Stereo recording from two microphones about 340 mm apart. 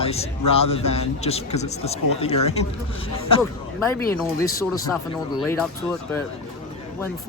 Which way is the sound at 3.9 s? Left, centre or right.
Centre.